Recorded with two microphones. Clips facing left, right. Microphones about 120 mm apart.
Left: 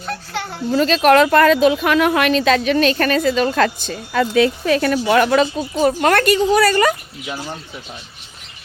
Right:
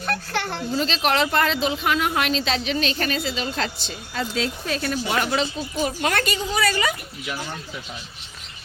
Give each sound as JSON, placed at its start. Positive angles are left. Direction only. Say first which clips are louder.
{"t": 0.7, "sound": "speech", "louder": "left 10 dB", "side_deg": 50}
{"t": 4.1, "sound": "speech", "louder": "left 11 dB", "side_deg": 75}
{"t": 6.6, "sound": "speech", "louder": "left 8 dB", "side_deg": 45}